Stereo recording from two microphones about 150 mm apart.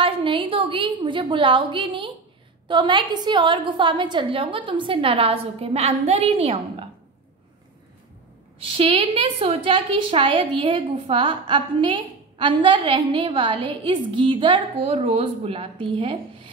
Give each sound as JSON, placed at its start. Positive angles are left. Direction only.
{"t": 0.0, "sound": "a woman's voice", "side_deg": -35}
{"t": 8.7, "sound": "a woman's voice", "side_deg": -35}